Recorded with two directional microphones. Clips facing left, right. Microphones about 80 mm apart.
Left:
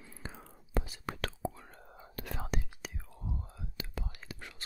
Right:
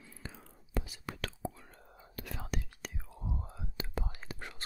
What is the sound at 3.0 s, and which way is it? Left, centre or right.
Whispering, centre.